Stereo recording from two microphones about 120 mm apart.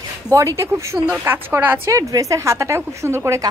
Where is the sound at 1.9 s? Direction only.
30° right (ahead or behind).